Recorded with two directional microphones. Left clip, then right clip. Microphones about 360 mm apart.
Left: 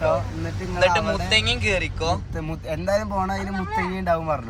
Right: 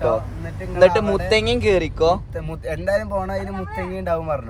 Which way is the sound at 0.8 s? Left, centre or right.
Centre.